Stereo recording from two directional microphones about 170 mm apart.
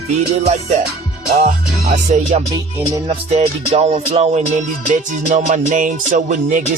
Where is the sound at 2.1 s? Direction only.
45° right (ahead or behind).